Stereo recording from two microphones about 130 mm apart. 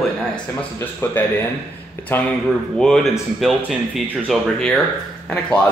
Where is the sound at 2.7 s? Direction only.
5° left (ahead or behind).